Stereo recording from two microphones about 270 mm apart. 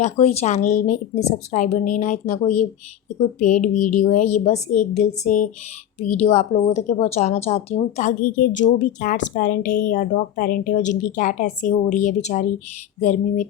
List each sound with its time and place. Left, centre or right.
0.0 s speech: left
6.0 s speech: left